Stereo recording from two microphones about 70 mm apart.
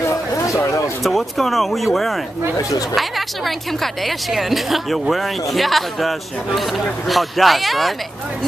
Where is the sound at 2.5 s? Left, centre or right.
Left.